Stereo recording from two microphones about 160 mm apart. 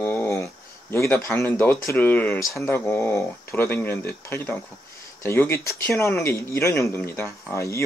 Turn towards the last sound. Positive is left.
turn(degrees=20)  # may be behind; listen again after turning